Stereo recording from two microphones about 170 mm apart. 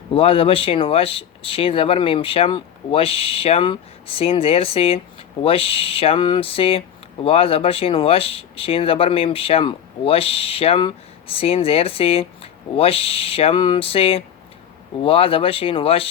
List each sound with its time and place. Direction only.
0.1 s speech: 35° left (ahead or behind)